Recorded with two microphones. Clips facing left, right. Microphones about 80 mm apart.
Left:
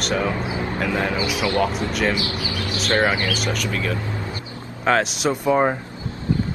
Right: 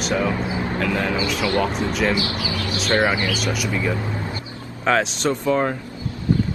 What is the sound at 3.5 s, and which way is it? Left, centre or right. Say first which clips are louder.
Speech: right 1 dB; centre.